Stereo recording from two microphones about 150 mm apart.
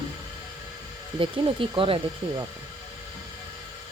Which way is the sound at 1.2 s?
35° right (ahead or behind).